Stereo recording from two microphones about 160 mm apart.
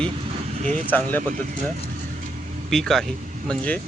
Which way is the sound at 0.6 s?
45° right (ahead or behind).